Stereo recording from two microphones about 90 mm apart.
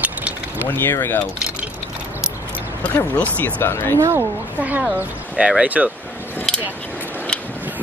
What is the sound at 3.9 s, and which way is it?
Speech, 30° right (ahead or behind).